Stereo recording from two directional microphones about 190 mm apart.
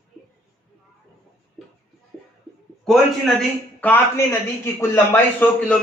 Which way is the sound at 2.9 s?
Centre (ahead or behind).